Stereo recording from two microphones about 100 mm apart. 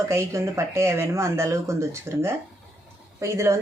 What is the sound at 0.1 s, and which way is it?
Speech, 30° right (ahead or behind).